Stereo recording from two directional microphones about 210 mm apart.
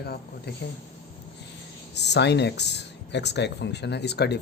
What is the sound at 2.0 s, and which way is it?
Speech, 55° left (ahead or behind).